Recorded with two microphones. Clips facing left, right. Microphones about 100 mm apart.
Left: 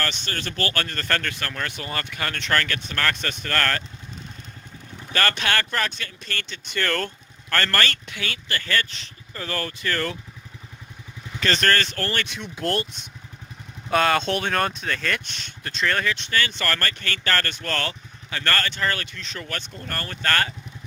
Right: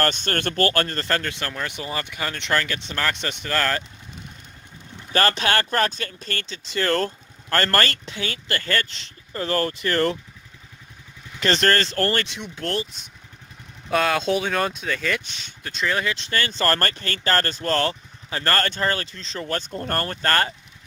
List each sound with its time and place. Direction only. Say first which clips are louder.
0.0 s speech: right 6 dB; 50° right (ahead or behind)
1.0 s speech: right 1 dB; 20° right (ahead or behind)
5.1 s speech: right 3 dB; 30° right (ahead or behind)
6.7 s speech: right 4 dB; 30° right (ahead or behind)
11.4 s speech: right 2 dB; 30° right (ahead or behind)
12.5 s speech: left 2 dB; centre (ahead or behind)
16.0 s speech: even; 30° right (ahead or behind)
19.7 s speech: right 7 dB; 45° right (ahead or behind)